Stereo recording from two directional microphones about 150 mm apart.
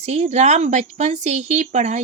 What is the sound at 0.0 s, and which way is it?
Speech, 50° right (ahead or behind).